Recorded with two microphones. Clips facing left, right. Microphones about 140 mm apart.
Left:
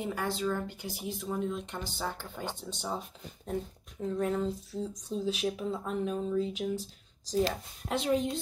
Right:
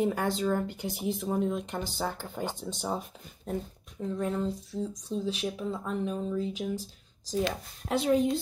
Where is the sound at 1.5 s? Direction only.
10° right (ahead or behind).